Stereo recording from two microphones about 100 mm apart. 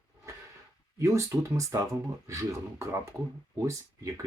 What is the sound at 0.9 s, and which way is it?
Speech, 30° right (ahead or behind).